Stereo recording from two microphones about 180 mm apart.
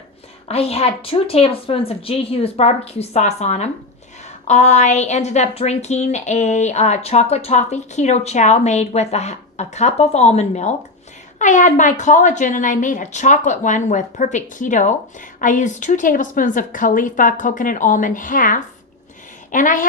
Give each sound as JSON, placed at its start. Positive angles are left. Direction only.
{"t": 0.4, "sound": "a woman's voice", "side_deg": 35}